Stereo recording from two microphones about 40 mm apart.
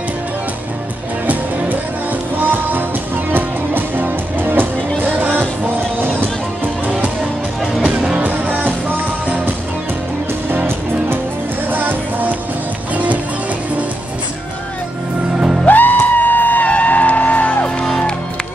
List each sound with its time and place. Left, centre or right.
2.4 s music: right
7.8 s music: centre
8.2 s music: right
11.7 s music: right
15.6 s music: left